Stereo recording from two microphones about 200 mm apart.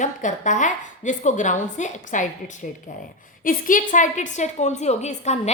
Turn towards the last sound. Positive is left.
turn(degrees=35)  # may be behind; listen again after turning